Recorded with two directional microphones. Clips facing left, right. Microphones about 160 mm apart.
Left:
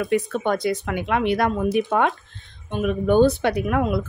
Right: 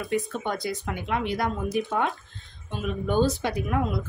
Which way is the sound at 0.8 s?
70° left (ahead or behind).